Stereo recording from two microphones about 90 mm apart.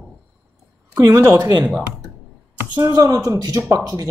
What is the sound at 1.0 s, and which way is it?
Speech, 25° right (ahead or behind).